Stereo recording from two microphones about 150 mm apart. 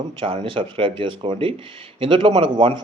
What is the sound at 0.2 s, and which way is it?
A man's voice, 35° right (ahead or behind).